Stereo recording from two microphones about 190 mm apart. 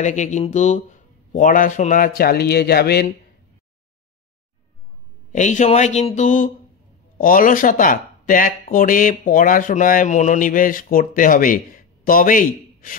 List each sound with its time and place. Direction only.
0.0 s speech: 40° left (ahead or behind); by 3.1 s 55° left (ahead or behind)
5.3 s speech: 40° left (ahead or behind)